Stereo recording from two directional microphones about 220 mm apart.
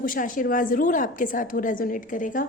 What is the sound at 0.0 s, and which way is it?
A woman's voice, 40° left (ahead or behind).